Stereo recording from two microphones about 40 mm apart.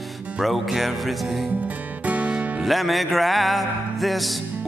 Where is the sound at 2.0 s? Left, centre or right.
Right.